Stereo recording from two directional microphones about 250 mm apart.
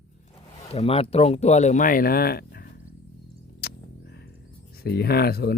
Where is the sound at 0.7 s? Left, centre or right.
Left.